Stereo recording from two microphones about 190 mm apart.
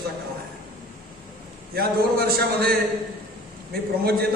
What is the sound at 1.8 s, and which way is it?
Speech, 55° right (ahead or behind).